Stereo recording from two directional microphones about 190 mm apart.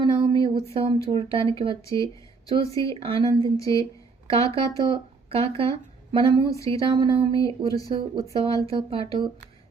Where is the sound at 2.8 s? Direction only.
25° right (ahead or behind).